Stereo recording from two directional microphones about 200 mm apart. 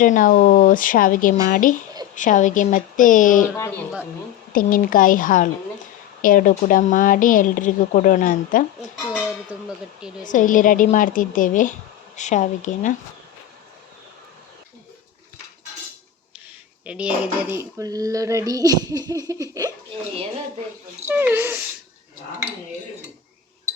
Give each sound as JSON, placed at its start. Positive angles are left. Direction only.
{"t": 0.0, "sound": "a woman's voice", "side_deg": 40}
{"t": 4.5, "sound": "a woman's voice", "side_deg": 45}
{"t": 9.5, "sound": "speech", "side_deg": -5}
{"t": 10.2, "sound": "a woman's voice", "side_deg": 40}
{"t": 16.8, "sound": "dishes", "side_deg": -5}
{"t": 21.1, "sound": "dishes", "side_deg": -10}